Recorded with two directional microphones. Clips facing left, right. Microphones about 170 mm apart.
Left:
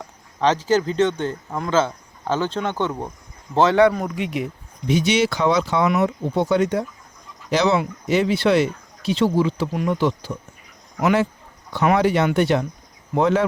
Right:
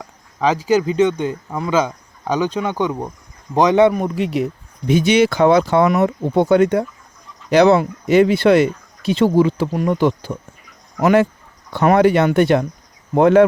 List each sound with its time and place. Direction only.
0.0 s speech: 5° right (ahead or behind)
4.1 s speech: 35° right (ahead or behind)
4.9 s speech: 50° right (ahead or behind)